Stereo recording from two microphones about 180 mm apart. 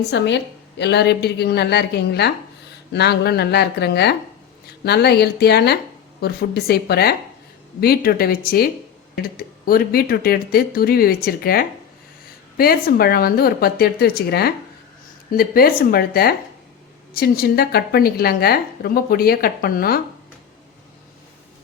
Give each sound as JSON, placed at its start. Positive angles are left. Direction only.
{"t": 0.0, "sound": "a woman's voice", "side_deg": 75}